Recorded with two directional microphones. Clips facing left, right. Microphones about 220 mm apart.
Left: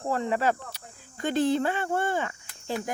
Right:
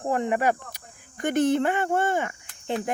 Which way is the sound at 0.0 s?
15° right (ahead or behind).